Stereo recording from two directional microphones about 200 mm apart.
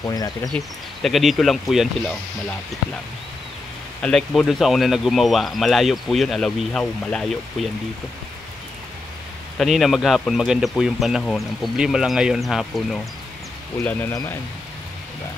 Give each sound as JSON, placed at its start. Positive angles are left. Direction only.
{"t": 0.0, "sound": "speech", "side_deg": 20}
{"t": 1.0, "sound": "speech", "side_deg": 0}
{"t": 4.0, "sound": "speech", "side_deg": 0}
{"t": 9.6, "sound": "speech", "side_deg": 0}
{"t": 13.8, "sound": "speech", "side_deg": 10}